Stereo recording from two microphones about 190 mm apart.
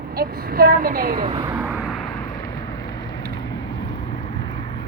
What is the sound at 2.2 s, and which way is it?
Vehicle, 15° left (ahead or behind).